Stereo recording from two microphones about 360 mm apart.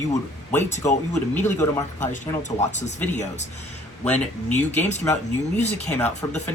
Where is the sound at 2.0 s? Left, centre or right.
Centre.